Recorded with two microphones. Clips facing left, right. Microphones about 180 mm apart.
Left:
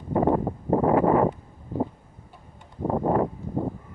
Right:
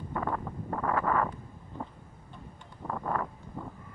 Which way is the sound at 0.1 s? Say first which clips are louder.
Left 12 dB; 25° left (ahead or behind).